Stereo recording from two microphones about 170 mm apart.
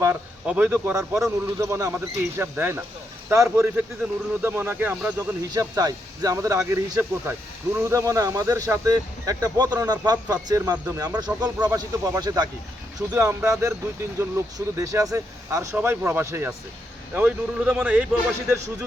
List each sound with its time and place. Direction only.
0.0 s speech: 10° right (ahead or behind)